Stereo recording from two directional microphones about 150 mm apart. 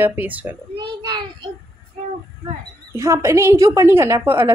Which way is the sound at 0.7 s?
30° right (ahead or behind).